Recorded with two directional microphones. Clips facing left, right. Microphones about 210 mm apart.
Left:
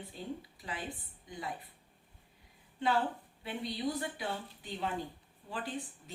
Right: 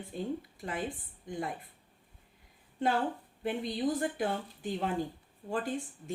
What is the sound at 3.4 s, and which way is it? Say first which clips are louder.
A woman's voice: right 5 dB; 50° right (ahead or behind).